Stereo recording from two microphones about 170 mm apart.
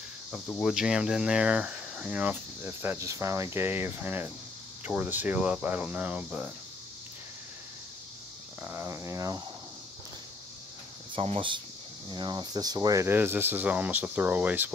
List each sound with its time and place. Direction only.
0.3 s speech: centre (ahead or behind)
8.6 s speech: 15° right (ahead or behind)
11.1 s speech: 35° right (ahead or behind); by 14.7 s 10° right (ahead or behind)